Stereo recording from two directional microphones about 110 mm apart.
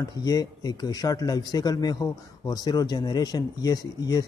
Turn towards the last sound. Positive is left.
turn(degrees=35)  # may be behind; listen again after turning